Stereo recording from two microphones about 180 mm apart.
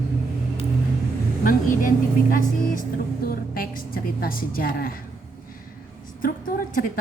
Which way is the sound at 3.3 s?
55° left (ahead or behind).